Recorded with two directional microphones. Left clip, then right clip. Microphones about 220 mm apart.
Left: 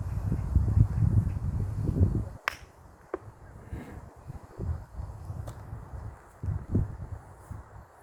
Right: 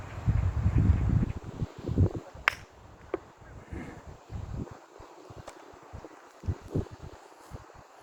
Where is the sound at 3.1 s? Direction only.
30° left (ahead or behind).